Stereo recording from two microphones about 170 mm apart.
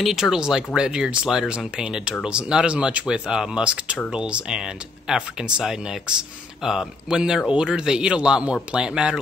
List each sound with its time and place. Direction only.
0.0 s speech: centre (ahead or behind)